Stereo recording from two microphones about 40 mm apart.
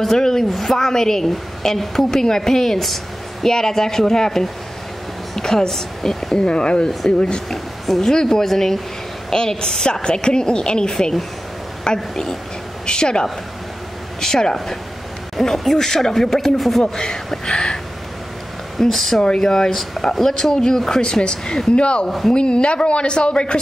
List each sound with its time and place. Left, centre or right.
0.0 s a woman's voice: centre
6.3 s a woman's voice: left
7.5 s a woman's voice: centre
16.8 s a woman's voice: centre
18.8 s a woman's voice: centre
19.2 s a woman's voice: centre